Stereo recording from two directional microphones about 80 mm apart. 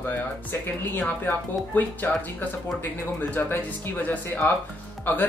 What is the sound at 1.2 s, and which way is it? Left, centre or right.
Speech, left.